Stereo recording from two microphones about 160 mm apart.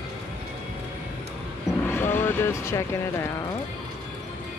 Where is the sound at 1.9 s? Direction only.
15° left (ahead or behind).